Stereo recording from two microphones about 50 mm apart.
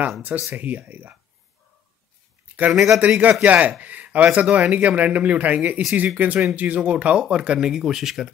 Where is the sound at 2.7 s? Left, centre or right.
Centre.